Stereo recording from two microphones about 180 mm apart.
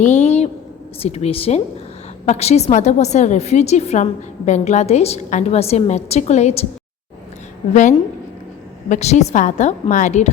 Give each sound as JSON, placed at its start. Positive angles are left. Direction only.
{"t": 0.0, "sound": "a woman's voice", "side_deg": 40}
{"t": 7.7, "sound": "a woman's voice", "side_deg": 45}